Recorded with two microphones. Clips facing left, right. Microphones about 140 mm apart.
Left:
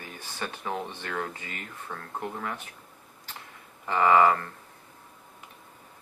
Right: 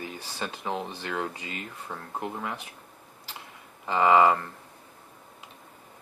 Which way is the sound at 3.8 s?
20° right (ahead or behind).